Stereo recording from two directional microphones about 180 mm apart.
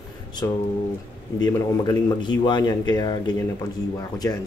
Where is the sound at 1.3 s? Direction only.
20° left (ahead or behind).